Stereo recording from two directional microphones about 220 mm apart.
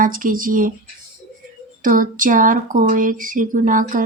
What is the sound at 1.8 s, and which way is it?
Speech, 40° right (ahead or behind).